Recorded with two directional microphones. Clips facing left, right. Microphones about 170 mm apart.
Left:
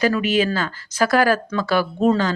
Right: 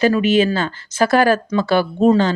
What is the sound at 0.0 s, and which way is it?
Speech, 25° right (ahead or behind).